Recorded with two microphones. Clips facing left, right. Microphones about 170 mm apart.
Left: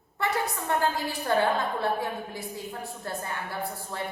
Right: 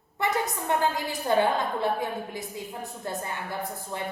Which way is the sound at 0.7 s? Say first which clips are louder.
Right 1 dB; 15° right (ahead or behind).